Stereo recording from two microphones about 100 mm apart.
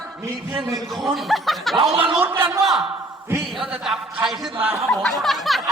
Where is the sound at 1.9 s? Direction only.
65° right (ahead or behind).